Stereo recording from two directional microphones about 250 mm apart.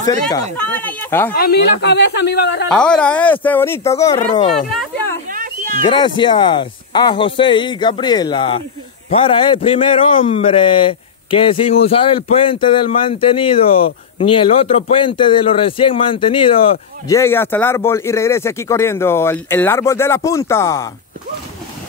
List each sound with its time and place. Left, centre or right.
0.6 s speech: centre
1.3 s speech: left
2.7 s speech: centre
4.2 s a man's voice: left
4.6 s a sound: centre
5.3 s a sound: right
5.8 s a man's voice: centre
17.1 s speech: centre